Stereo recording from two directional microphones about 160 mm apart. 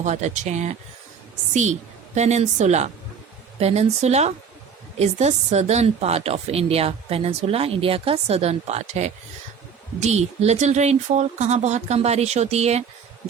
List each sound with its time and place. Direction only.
0.0 s speech: 50° right (ahead or behind)
2.1 s speech: 45° right (ahead or behind)